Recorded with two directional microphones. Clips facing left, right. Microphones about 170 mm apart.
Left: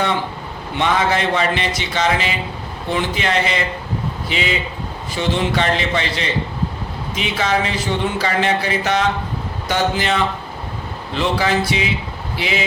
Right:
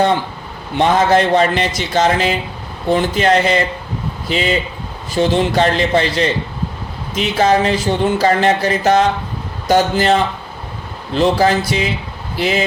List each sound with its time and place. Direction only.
0.8 s a man's voice: 40° right (ahead or behind)